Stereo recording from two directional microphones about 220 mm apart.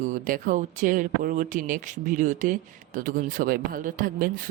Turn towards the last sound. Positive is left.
turn(degrees=-40)  # may be behind; listen again after turning